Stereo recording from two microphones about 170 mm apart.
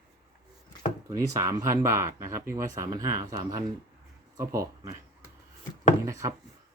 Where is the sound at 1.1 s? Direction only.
20° right (ahead or behind).